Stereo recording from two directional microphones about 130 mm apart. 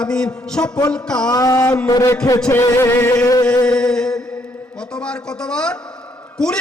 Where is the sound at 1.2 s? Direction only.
25° left (ahead or behind).